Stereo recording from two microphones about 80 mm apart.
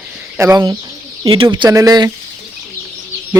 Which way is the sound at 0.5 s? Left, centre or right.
Right.